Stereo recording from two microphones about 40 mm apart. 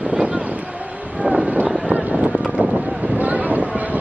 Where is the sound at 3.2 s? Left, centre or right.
Right.